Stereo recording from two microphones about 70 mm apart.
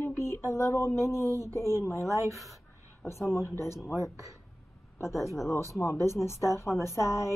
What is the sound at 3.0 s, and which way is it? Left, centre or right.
Speech, left.